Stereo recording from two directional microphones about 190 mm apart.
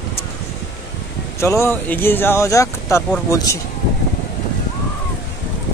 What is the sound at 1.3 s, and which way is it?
Speech, 15° left (ahead or behind).